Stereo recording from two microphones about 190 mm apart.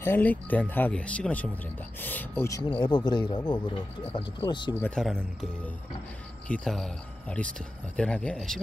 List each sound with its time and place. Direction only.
0.0 s speech: 10° left (ahead or behind)
4.8 s speech: 5° left (ahead or behind)